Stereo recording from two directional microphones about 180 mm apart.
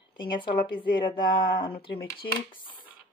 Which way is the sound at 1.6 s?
55° left (ahead or behind).